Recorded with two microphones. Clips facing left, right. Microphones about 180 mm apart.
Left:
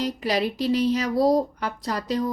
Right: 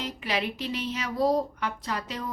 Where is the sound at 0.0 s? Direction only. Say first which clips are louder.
Left 6 dB; 35° left (ahead or behind).